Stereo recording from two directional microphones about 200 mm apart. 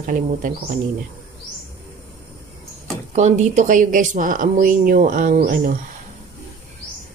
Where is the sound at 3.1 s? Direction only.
35° right (ahead or behind).